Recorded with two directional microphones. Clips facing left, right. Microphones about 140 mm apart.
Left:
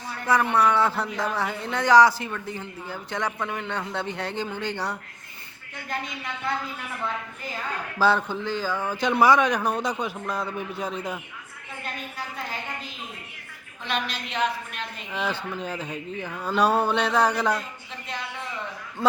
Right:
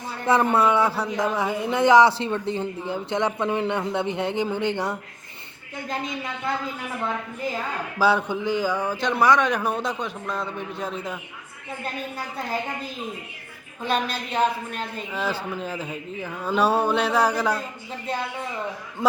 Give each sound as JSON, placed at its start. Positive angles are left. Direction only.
{"t": 0.3, "sound": "a man's voice", "side_deg": -25}
{"t": 7.9, "sound": "speech", "side_deg": -10}
{"t": 9.0, "sound": "a man's voice", "side_deg": 5}
{"t": 13.8, "sound": "a woman's voice", "side_deg": -40}
{"t": 15.1, "sound": "a man's voice", "side_deg": -5}